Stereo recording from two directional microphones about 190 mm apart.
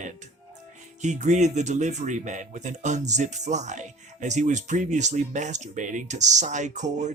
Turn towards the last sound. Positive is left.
turn(degrees=-40)  # may be behind; listen again after turning